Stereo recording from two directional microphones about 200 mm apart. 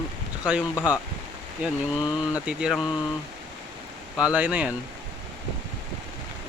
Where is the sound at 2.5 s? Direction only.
5° right (ahead or behind).